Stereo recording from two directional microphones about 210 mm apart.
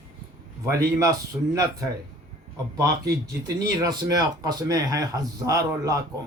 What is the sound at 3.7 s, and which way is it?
Speech, 15° right (ahead or behind).